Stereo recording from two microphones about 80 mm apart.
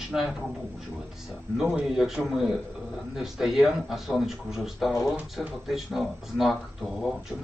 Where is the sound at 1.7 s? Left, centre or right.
Centre.